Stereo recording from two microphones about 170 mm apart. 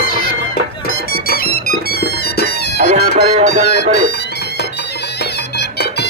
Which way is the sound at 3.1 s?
40° right (ahead or behind).